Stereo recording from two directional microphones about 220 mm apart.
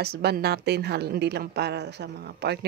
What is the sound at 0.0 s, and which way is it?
A woman's voice, 45° right (ahead or behind).